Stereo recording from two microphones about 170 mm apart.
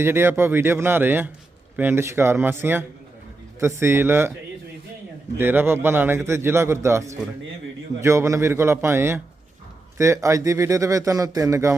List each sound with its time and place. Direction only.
0.0 s a man's voice: 15° right (ahead or behind)
5.4 s a man's voice: 10° right (ahead or behind)